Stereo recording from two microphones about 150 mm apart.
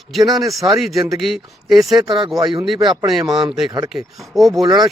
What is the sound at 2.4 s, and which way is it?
Speech, 20° right (ahead or behind).